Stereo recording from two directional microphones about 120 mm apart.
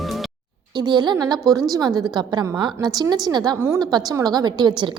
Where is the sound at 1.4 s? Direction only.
Centre (ahead or behind).